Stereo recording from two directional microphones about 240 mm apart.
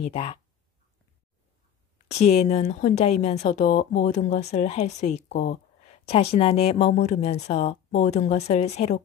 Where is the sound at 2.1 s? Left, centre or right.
Left.